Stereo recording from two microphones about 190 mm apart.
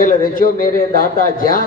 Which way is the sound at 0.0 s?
45° left (ahead or behind).